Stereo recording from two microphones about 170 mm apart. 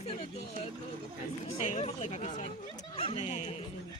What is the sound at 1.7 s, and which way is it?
Speech, 40° left (ahead or behind).